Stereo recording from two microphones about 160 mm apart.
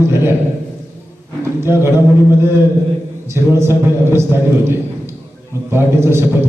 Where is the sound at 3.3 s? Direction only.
15° right (ahead or behind).